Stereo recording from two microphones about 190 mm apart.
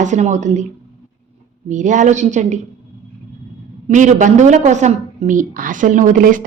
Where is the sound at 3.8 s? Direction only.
40° right (ahead or behind).